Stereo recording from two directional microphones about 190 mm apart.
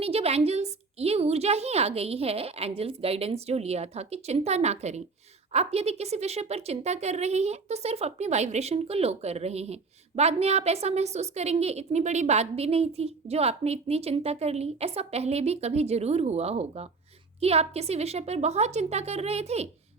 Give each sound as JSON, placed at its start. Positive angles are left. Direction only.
{"t": 0.0, "sound": "a woman's voice", "side_deg": -30}